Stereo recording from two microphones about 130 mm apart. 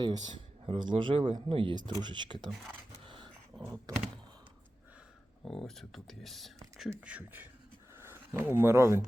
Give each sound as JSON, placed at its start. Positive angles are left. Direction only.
{"t": 0.0, "sound": "speech", "side_deg": -35}
{"t": 3.1, "sound": "dog", "side_deg": -40}
{"t": 5.5, "sound": "speech", "side_deg": 5}
{"t": 7.0, "sound": "speech", "side_deg": -10}